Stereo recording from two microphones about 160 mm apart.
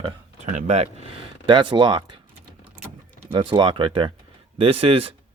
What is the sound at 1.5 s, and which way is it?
Speech, 30° right (ahead or behind).